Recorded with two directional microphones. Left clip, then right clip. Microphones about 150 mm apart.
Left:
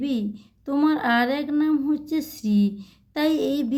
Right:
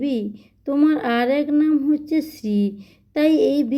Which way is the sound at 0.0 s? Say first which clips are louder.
Right 3 dB; 15° right (ahead or behind).